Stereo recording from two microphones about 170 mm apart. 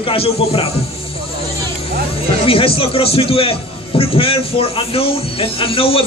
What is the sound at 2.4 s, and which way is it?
Speech, 35° left (ahead or behind).